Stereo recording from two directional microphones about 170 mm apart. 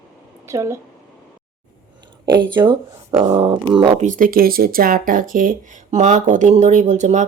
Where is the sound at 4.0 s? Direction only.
50° right (ahead or behind).